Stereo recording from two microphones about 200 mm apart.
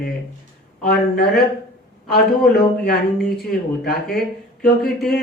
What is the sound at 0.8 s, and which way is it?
Speech, 50° left (ahead or behind).